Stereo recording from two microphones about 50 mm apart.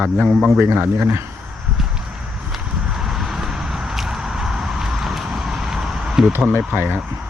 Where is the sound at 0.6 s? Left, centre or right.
Right.